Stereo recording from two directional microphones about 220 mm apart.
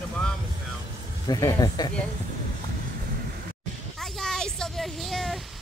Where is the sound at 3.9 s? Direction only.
Centre (ahead or behind).